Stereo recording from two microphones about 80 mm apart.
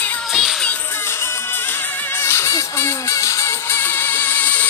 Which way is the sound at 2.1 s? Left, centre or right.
Left.